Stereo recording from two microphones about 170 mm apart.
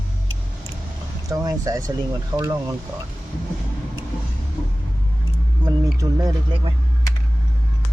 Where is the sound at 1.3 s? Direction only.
20° right (ahead or behind).